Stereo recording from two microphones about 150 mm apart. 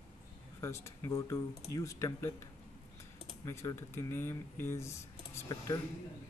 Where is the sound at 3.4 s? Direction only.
20° left (ahead or behind).